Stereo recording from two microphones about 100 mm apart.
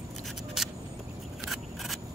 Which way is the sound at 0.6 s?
5° right (ahead or behind).